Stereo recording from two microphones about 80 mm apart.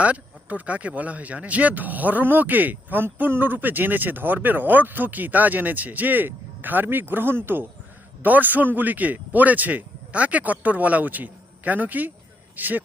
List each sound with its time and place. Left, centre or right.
0.0 s speech: centre